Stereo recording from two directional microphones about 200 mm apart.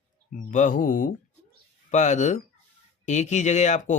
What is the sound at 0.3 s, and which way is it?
Speech, 40° left (ahead or behind).